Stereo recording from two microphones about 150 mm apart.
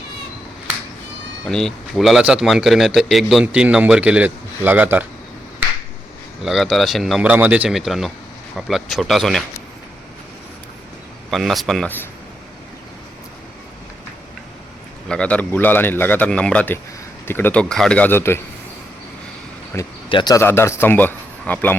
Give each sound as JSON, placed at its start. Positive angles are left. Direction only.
{"t": 1.5, "sound": "speech", "side_deg": 5}
{"t": 6.4, "sound": "speech", "side_deg": 0}
{"t": 11.3, "sound": "speech", "side_deg": 0}
{"t": 15.1, "sound": "a man's voice", "side_deg": 10}
{"t": 19.7, "sound": "a man's voice", "side_deg": 15}
{"t": 20.1, "sound": "speech", "side_deg": 30}
{"t": 20.4, "sound": "a man's voice", "side_deg": 15}